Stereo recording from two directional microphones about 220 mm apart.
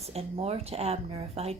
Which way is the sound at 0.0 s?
30° right (ahead or behind).